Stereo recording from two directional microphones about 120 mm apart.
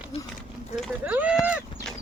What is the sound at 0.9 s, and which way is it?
Speech, 10° right (ahead or behind).